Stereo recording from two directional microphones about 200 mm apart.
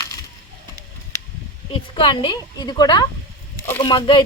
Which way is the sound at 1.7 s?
25° left (ahead or behind).